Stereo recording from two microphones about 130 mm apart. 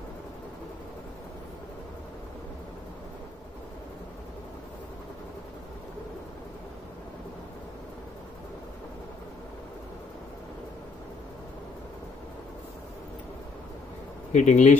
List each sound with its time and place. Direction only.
14.3 s speech: 65° left (ahead or behind)